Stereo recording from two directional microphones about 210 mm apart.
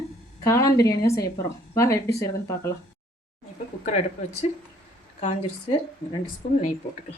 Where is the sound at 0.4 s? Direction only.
15° left (ahead or behind).